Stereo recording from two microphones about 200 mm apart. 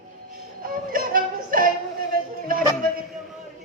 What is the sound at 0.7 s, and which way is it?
Music, 45° right (ahead or behind).